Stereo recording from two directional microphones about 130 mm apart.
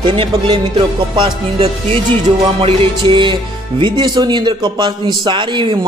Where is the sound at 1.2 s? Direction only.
45° right (ahead or behind).